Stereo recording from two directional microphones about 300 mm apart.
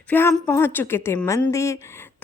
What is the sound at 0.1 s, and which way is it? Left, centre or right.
A woman's voice, centre.